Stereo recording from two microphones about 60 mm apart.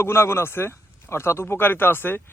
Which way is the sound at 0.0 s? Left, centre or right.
Left.